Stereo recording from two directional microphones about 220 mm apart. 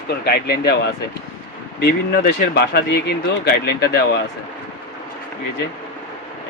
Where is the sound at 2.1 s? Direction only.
50° left (ahead or behind).